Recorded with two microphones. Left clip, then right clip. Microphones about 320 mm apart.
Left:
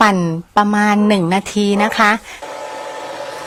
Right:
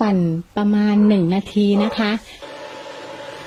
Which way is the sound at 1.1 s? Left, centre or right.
Left.